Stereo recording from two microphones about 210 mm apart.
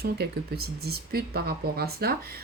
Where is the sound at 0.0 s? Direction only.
50° right (ahead or behind).